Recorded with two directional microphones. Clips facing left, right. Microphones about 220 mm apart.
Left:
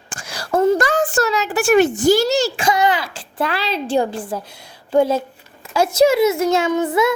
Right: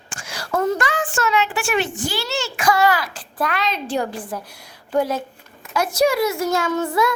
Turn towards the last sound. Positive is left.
turn(degrees=20)  # may be behind; listen again after turning